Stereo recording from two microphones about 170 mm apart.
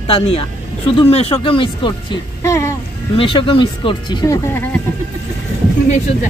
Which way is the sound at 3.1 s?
30° left (ahead or behind).